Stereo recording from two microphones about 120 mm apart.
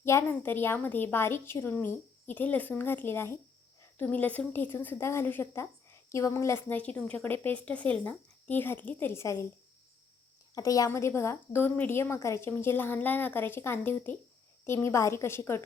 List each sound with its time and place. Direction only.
0.0 s a woman's voice: 20° left (ahead or behind)
10.5 s a woman's voice: 30° left (ahead or behind)